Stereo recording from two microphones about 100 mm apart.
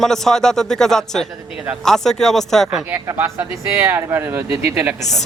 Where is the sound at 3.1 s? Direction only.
20° right (ahead or behind).